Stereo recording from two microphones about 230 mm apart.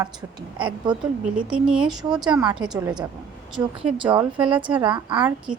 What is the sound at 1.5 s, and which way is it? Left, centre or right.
A woman's voice, centre.